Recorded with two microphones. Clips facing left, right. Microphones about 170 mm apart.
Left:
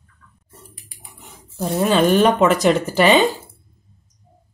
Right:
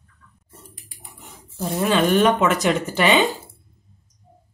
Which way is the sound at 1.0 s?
Centre (ahead or behind).